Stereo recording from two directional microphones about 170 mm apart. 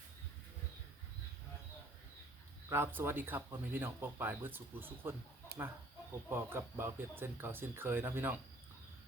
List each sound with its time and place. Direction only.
2.6 s speech: 15° right (ahead or behind)
5.5 s chicken: 60° right (ahead or behind)
6.2 s speech: 15° right (ahead or behind)